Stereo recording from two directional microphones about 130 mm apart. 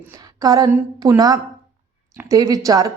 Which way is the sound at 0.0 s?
25° right (ahead or behind).